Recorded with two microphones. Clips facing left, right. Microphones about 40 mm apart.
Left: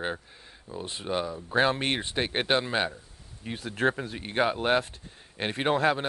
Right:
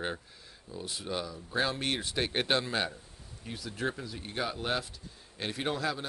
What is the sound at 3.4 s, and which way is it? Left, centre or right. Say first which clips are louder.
Speech: left 8 dB; left.